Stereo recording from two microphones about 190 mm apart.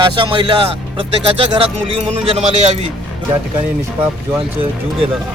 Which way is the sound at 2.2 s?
30° right (ahead or behind).